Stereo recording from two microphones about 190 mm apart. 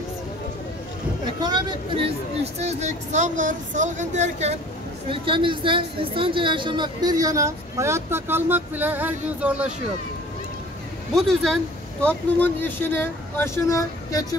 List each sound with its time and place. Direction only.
1.2 s speech: 20° right (ahead or behind)
2.6 s a woman's voice: 35° right (ahead or behind); by 9.7 s 5° right (ahead or behind)
11.1 s speech: centre (ahead or behind)